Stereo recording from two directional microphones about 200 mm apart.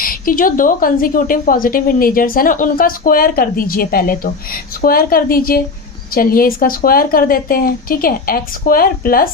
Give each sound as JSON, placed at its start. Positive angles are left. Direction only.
{"t": 0.0, "sound": "speech", "side_deg": 45}